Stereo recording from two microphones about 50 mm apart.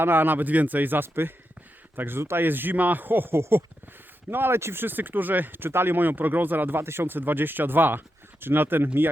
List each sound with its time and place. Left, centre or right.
0.0 s speech: right